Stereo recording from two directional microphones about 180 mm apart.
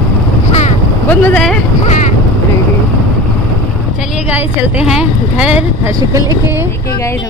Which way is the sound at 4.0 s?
5° right (ahead or behind).